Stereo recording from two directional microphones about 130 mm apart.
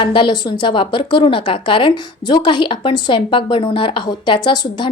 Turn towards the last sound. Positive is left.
turn(degrees=35)  # may be behind; listen again after turning